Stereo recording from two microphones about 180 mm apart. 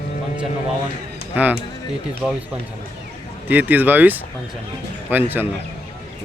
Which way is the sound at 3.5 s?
10° right (ahead or behind).